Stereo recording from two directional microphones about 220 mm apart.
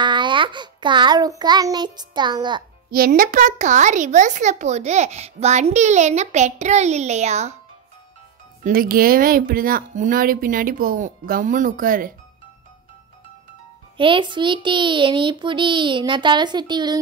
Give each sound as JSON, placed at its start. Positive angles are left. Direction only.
{"t": 0.0, "sound": "a child's voice", "side_deg": -20}
{"t": 2.9, "sound": "a child's voice", "side_deg": -40}
{"t": 8.6, "sound": "a child's voice", "side_deg": -40}
{"t": 13.9, "sound": "speech", "side_deg": -20}